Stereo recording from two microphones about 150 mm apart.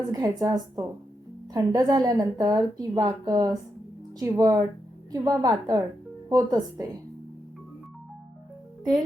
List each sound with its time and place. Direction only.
0.1 s a woman's voice: 25° right (ahead or behind)